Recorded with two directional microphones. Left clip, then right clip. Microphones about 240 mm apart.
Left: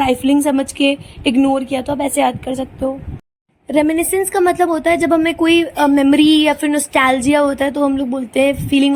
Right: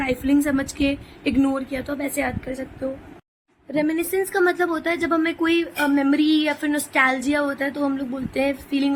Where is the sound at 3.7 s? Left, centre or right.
Left.